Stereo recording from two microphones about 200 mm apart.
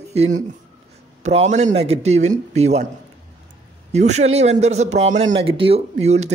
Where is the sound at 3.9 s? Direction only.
35° right (ahead or behind).